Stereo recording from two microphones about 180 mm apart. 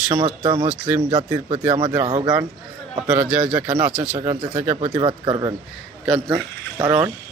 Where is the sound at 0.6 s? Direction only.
5° right (ahead or behind).